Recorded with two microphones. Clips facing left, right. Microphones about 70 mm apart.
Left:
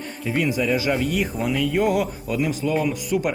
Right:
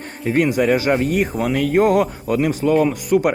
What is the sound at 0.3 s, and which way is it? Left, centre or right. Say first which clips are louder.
A man's voice: right 6 dB; right.